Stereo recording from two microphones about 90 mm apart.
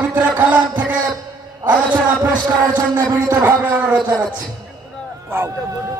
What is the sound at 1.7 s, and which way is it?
Speech, 20° right (ahead or behind).